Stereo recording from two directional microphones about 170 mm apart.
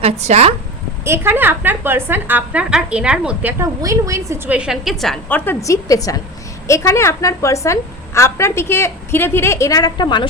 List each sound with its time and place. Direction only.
0.0 s a woman's voice: 40° right (ahead or behind)
1.0 s a woman's voice: 15° right (ahead or behind)
3.6 s a woman's voice: 20° right (ahead or behind); by 5.5 s 5° left (ahead or behind)
5.6 s a woman's voice: 20° left (ahead or behind)